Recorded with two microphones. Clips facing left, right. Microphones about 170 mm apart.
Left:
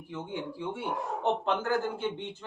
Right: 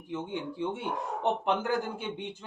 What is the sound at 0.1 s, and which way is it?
A man's voice, 20° right (ahead or behind).